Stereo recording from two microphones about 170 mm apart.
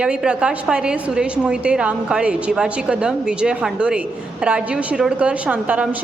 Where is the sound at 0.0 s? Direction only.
5° right (ahead or behind).